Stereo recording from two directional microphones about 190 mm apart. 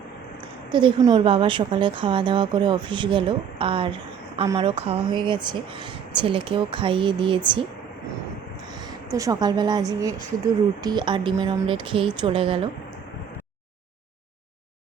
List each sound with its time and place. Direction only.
0.7 s a woman's voice: 25° right (ahead or behind)
8.7 s a woman's voice: 20° right (ahead or behind)